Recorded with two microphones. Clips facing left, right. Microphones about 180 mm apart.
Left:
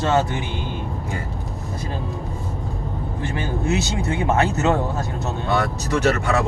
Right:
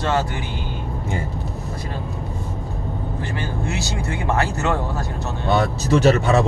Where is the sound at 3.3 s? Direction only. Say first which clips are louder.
Left 6 dB; 20° left (ahead or behind).